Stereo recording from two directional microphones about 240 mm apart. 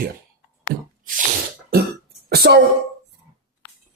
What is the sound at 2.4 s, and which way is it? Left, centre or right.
Speech, right.